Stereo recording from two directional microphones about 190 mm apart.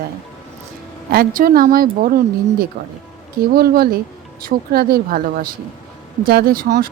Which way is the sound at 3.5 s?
55° right (ahead or behind).